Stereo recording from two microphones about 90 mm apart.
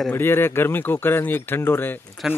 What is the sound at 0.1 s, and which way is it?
Speech, 25° left (ahead or behind).